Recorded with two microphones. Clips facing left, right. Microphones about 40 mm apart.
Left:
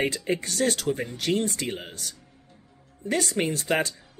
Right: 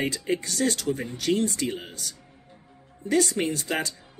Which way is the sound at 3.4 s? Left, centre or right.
Left.